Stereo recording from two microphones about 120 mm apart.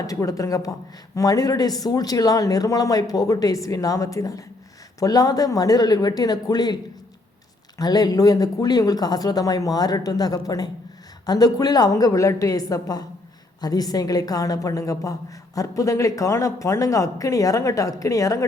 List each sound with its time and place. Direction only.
0.1 s speech: 30° left (ahead or behind)
7.8 s speech: 35° left (ahead or behind)